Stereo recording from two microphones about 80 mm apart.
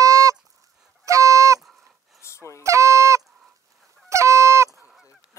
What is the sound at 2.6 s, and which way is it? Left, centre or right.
Goose, right.